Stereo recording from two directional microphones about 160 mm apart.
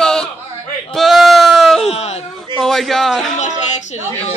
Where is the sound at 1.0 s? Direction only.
Centre (ahead or behind).